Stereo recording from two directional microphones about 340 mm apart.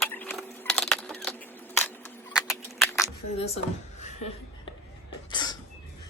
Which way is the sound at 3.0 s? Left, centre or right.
Centre.